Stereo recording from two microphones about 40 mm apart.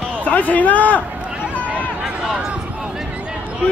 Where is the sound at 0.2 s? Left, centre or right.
Left.